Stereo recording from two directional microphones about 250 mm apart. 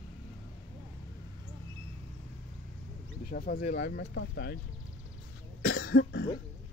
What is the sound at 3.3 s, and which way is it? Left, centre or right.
Speech, left.